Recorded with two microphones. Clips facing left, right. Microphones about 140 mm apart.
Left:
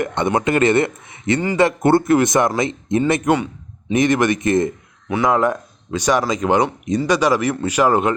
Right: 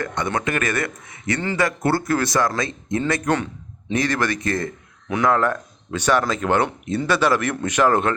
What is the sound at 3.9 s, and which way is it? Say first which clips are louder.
Speech: left 6 dB; 20° left (ahead or behind).